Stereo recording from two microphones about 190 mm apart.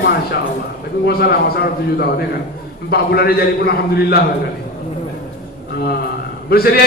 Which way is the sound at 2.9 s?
55° left (ahead or behind).